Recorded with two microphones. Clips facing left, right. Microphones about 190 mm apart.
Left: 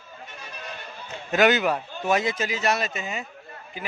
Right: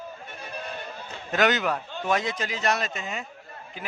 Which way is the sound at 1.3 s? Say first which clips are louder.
Left 3 dB; 10° left (ahead or behind).